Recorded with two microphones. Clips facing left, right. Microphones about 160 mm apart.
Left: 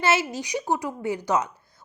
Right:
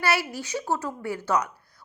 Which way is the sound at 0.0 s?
20° left (ahead or behind).